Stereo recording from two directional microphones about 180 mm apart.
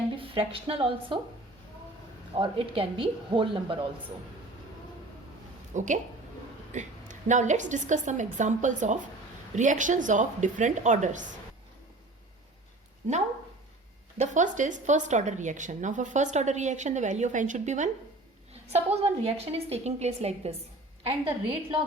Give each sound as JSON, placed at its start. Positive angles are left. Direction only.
{"t": 0.2, "sound": "speech", "side_deg": -30}
{"t": 2.3, "sound": "speech", "side_deg": -30}
{"t": 5.7, "sound": "a woman's voice", "side_deg": -45}
{"t": 13.0, "sound": "a woman's voice", "side_deg": -40}